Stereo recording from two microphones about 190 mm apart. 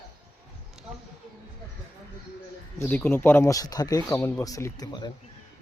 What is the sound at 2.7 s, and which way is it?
Speech, 10° left (ahead or behind).